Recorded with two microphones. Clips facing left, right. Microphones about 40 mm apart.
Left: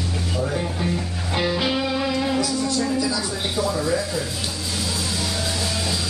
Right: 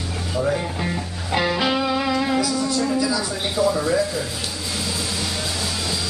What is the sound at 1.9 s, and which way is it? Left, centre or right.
Music, centre.